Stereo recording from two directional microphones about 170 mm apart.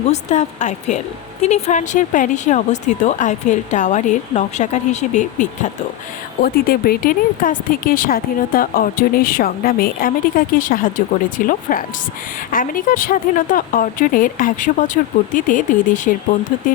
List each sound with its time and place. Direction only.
0.1 s a woman's voice: 45° left (ahead or behind)
6.4 s a woman's voice: 60° left (ahead or behind)